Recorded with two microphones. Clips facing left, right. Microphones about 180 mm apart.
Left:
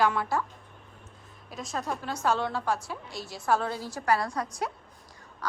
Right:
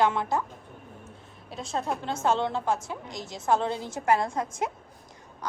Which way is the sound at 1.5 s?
30° right (ahead or behind).